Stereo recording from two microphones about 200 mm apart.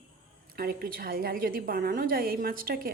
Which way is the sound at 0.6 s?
50° right (ahead or behind).